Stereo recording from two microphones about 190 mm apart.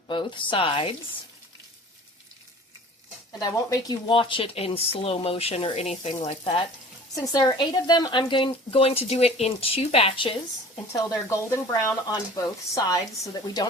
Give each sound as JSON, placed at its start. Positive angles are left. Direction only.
{"t": 0.1, "sound": "speech", "side_deg": 25}
{"t": 3.4, "sound": "speech", "side_deg": 20}
{"t": 7.9, "sound": "speech", "side_deg": 20}
{"t": 10.9, "sound": "speech", "side_deg": 15}